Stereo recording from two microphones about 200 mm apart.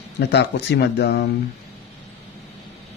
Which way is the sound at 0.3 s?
55° left (ahead or behind).